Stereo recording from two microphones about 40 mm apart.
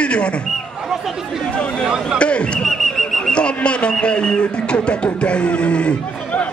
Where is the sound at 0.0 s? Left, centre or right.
Left.